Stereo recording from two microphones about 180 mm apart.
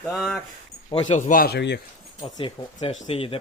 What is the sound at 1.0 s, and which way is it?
Speech, 40° left (ahead or behind).